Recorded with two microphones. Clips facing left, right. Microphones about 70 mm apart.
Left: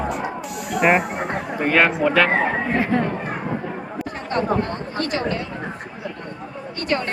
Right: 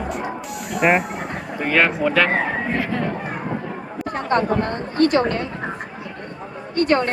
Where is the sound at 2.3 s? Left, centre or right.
Left.